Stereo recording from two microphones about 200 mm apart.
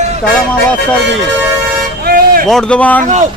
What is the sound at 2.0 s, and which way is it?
Vehicle, 45° right (ahead or behind).